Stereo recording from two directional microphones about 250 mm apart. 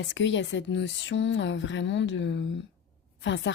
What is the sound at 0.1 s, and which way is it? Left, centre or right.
A woman's voice, left.